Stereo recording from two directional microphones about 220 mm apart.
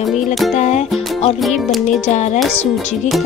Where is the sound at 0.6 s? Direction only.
30° left (ahead or behind).